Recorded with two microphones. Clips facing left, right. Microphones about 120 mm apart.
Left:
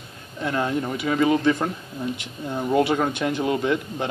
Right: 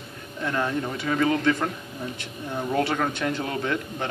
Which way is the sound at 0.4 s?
20° left (ahead or behind).